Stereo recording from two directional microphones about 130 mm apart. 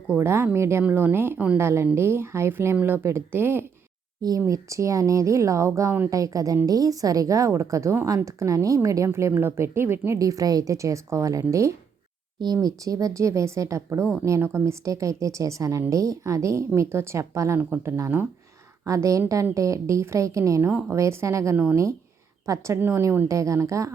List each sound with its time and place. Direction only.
0.1 s a woman's voice: 20° right (ahead or behind)